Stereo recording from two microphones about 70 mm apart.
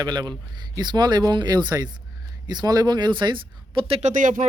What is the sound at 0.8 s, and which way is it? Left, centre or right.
Speech, right.